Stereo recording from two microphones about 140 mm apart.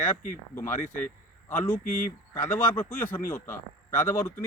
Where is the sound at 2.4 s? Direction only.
15° left (ahead or behind).